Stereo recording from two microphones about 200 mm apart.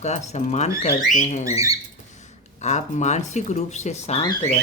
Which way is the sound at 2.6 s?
35° left (ahead or behind).